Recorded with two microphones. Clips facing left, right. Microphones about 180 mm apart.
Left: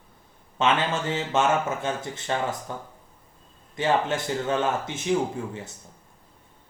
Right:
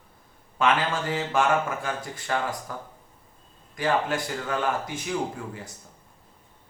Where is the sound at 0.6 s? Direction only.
25° left (ahead or behind).